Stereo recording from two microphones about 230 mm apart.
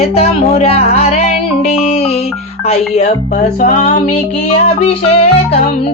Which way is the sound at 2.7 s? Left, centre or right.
Left.